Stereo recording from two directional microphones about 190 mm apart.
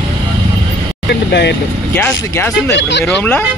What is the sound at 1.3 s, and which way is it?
Speech, 65° left (ahead or behind).